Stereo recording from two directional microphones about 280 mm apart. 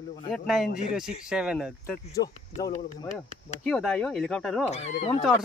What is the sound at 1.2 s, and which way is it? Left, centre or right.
Speech, centre.